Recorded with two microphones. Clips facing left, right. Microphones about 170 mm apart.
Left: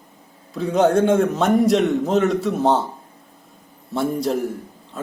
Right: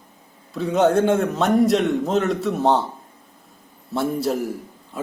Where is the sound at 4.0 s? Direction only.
Centre (ahead or behind).